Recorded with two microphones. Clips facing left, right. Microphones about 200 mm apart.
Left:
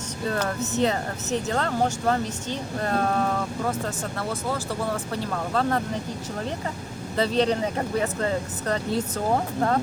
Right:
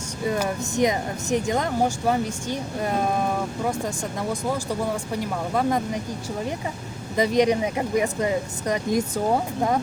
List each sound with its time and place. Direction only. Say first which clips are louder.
0.3 s speech: right 2 dB; 15° right (ahead or behind)
7.2 s speech: right 3 dB; 15° right (ahead or behind)